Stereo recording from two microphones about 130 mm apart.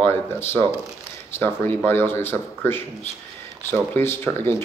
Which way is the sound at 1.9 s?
15° left (ahead or behind).